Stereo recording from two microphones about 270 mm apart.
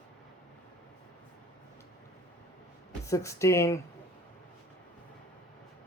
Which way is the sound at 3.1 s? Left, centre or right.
Centre.